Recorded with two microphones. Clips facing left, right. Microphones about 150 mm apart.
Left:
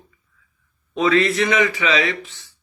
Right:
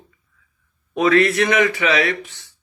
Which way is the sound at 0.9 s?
55° right (ahead or behind).